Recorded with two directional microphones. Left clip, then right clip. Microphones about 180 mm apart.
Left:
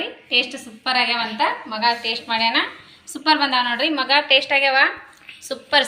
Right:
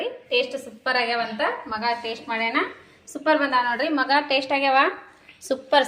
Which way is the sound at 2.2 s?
35° right (ahead or behind).